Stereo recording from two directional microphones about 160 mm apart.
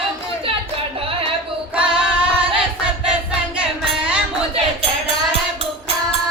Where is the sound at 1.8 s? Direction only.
5° right (ahead or behind).